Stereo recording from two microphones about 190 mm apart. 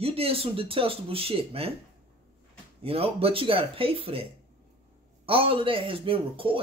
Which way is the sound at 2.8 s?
30° right (ahead or behind).